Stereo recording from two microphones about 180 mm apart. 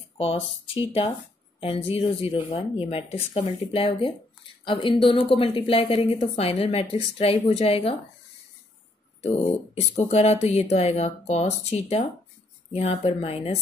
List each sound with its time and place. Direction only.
0.2 s speech: 30° left (ahead or behind)
9.8 s speech: 35° left (ahead or behind)